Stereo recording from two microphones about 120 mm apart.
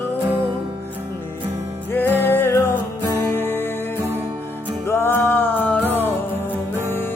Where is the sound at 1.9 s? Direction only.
20° left (ahead or behind).